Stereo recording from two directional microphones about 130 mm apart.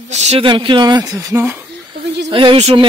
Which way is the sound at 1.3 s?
20° right (ahead or behind).